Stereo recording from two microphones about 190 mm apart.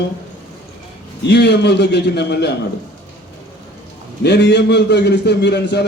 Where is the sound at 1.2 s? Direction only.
65° left (ahead or behind).